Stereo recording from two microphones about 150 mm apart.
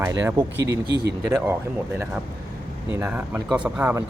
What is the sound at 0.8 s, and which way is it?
Speech, 90° right.